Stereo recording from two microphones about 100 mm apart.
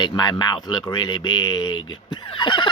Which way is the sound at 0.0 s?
45° left (ahead or behind).